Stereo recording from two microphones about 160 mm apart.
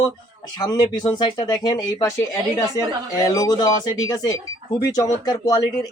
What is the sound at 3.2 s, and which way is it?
Speech, 20° left (ahead or behind).